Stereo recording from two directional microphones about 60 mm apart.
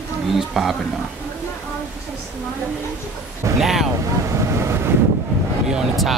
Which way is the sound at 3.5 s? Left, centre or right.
Centre.